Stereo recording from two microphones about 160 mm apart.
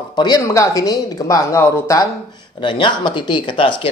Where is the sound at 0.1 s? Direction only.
25° left (ahead or behind).